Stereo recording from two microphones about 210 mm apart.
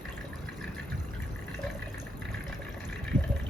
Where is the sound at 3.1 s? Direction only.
20° right (ahead or behind).